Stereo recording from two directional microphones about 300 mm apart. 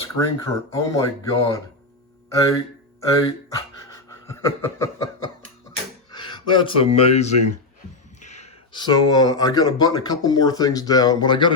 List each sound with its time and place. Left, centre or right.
0.2 s speech: centre
3.8 s a sound: centre
6.1 s speech: centre